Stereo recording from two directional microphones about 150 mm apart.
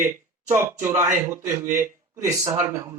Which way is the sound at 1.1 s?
60° right (ahead or behind).